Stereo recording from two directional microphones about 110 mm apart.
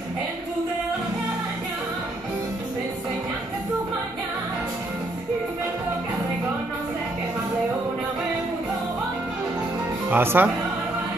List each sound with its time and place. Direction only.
10.0 s speech: 20° right (ahead or behind)